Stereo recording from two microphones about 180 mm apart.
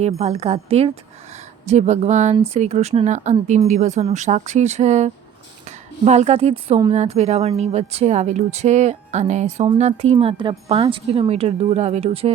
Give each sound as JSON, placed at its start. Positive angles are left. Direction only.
{"t": 0.0, "sound": "a woman's voice", "side_deg": -35}